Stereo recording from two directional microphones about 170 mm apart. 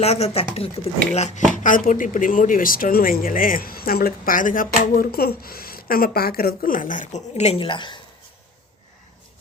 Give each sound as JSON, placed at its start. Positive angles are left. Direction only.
{"t": 0.0, "sound": "speech", "side_deg": 40}
{"t": 1.5, "sound": "speech", "side_deg": 50}